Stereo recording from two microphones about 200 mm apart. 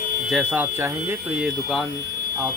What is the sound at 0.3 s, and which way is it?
Speech, 5° right (ahead or behind).